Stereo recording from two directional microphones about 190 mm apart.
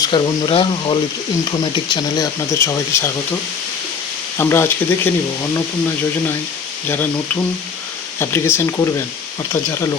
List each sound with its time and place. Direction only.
0.0 s speech: 25° left (ahead or behind)
4.4 s speech: 15° left (ahead or behind)
6.8 s speech: 10° left (ahead or behind)
8.2 s speech: 10° left (ahead or behind)